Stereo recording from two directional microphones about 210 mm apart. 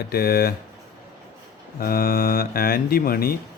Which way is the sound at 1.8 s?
45° left (ahead or behind).